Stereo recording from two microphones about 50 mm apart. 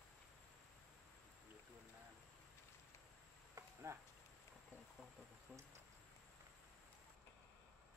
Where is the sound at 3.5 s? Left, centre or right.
Right.